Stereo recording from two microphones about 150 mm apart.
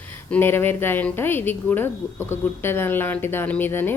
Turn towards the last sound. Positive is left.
turn(degrees=15)  # may be behind; listen again after turning